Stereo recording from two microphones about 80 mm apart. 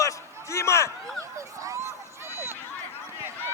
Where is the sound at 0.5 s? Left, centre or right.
Left.